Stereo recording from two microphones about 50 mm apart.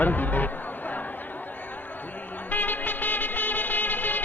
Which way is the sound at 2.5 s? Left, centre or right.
Left.